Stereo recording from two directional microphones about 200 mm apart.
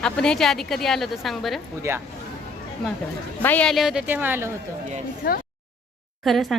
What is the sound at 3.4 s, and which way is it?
Speech, 5° left (ahead or behind).